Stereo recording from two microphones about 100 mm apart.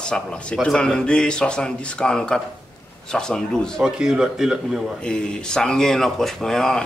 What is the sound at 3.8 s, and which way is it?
Speech, 5° right (ahead or behind).